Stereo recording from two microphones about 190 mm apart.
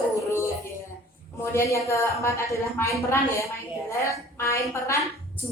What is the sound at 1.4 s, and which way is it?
A woman's voice, 15° left (ahead or behind).